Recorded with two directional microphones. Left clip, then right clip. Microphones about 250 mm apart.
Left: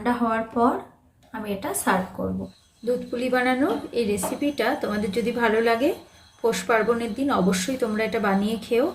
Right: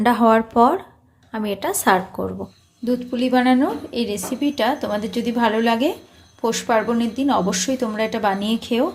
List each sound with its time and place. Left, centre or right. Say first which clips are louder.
0.0 s speech: right 9 dB; right
2.8 s a woman's voice: right 3 dB; right